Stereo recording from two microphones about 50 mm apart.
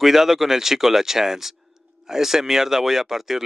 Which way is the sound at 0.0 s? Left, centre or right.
Centre.